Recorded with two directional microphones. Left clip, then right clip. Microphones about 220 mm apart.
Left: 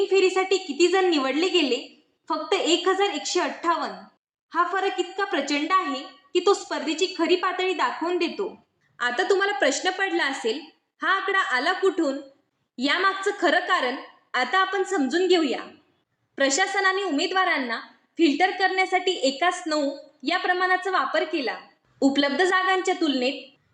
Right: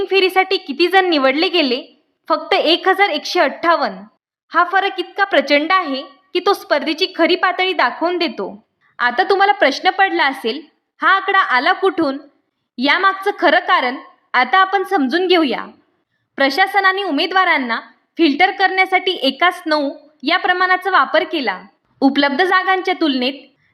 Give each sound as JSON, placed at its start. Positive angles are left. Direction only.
{"t": 0.1, "sound": "a woman's voice", "side_deg": -55}
{"t": 9.0, "sound": "a woman's voice", "side_deg": -40}